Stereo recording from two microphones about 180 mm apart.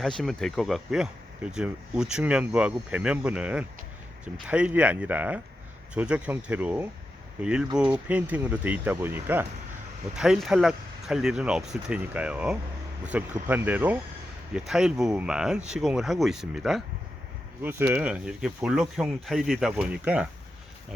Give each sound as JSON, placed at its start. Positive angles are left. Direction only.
{"t": 0.0, "sound": "speech", "side_deg": 5}